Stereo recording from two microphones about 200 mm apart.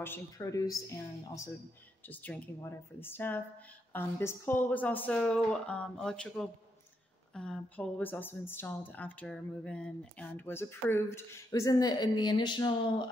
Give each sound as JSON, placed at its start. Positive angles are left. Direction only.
{"t": 0.0, "sound": "speech", "side_deg": 15}